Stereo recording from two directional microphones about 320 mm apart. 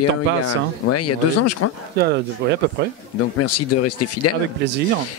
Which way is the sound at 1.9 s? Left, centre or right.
Right.